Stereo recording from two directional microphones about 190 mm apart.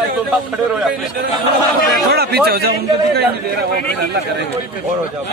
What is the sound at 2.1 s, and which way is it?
Speech, 55° right (ahead or behind).